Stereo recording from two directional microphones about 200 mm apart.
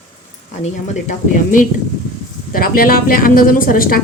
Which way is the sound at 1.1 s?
40° left (ahead or behind).